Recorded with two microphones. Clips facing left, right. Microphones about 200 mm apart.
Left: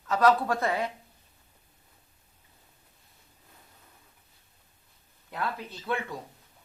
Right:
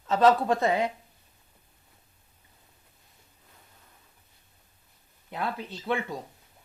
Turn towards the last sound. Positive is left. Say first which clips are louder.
# right 2 dB
turn(degrees=-20)  # may be behind; listen again after turning